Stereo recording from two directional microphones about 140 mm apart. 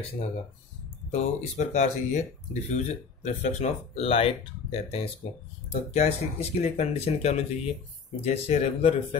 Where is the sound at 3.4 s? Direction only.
50° left (ahead or behind).